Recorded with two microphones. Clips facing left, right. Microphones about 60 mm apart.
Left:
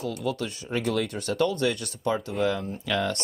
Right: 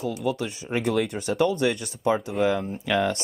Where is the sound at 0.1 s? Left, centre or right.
Centre.